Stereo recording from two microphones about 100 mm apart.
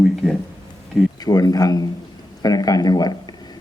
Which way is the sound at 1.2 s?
40° left (ahead or behind).